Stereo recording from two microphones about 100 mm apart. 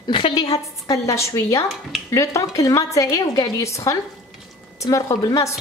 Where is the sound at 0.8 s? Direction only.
30° left (ahead or behind).